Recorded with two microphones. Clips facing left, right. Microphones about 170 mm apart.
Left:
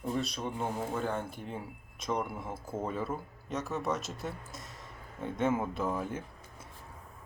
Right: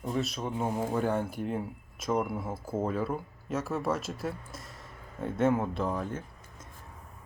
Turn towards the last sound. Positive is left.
turn(degrees=5)  # may be behind; listen again after turning